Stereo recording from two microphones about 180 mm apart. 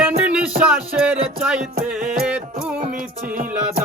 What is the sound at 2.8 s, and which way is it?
Music, 50° right (ahead or behind).